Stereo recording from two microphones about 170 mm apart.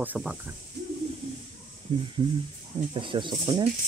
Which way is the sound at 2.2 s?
25° right (ahead or behind).